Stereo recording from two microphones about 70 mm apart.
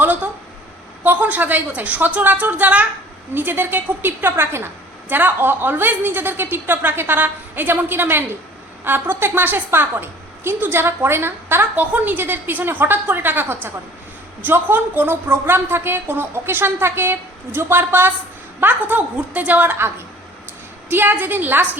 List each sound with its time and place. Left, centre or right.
0.0 s a sound: right
1.0 s a woman's voice: right
20.9 s a woman's voice: right